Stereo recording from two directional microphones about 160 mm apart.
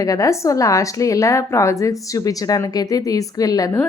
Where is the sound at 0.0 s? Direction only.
20° left (ahead or behind).